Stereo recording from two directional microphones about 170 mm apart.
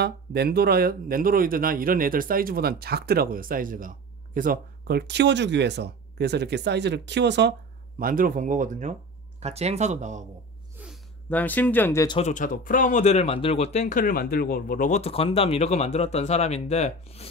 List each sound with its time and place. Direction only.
0.0 s speech: 70° right (ahead or behind); by 7.5 s 90° right
8.0 s speech: 55° right (ahead or behind)
10.8 s a sound: 10° right (ahead or behind)
11.2 s speech: 10° left (ahead or behind)
12.2 s speech: 45° left (ahead or behind)